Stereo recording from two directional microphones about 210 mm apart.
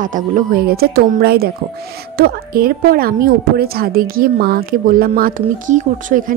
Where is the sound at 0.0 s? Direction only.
40° right (ahead or behind).